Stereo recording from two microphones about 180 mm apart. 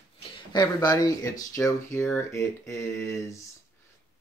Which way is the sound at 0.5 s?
20° left (ahead or behind).